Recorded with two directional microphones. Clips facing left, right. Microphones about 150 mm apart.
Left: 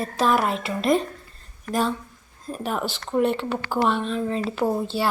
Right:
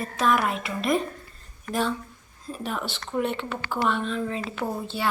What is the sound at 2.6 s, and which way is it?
A woman's voice, 45° left (ahead or behind).